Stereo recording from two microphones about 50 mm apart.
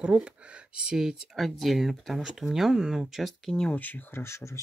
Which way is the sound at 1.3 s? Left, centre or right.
Centre.